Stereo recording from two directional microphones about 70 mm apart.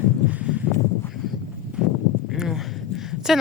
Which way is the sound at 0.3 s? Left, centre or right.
Centre.